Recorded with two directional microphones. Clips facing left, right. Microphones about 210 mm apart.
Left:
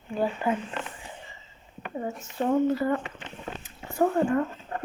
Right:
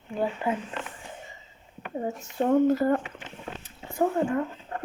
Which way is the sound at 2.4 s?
45° right (ahead or behind).